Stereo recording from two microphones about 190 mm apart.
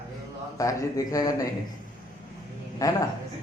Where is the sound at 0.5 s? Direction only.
15° left (ahead or behind).